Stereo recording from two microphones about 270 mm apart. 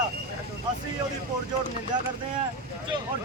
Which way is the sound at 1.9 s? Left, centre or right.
Centre.